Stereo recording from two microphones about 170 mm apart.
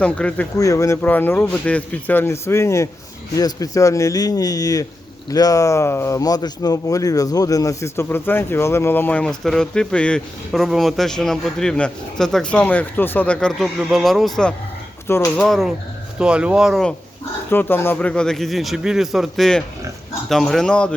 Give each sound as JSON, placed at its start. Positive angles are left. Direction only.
{"t": 0.0, "sound": "speech", "side_deg": 5}
{"t": 0.5, "sound": "a man's voice", "side_deg": 20}
{"t": 15.0, "sound": "speech", "side_deg": 15}
{"t": 15.4, "sound": "a man's voice", "side_deg": 0}
{"t": 17.5, "sound": "a man's voice", "side_deg": 10}